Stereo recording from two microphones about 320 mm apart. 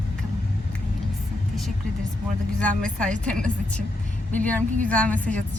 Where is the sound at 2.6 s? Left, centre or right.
Centre.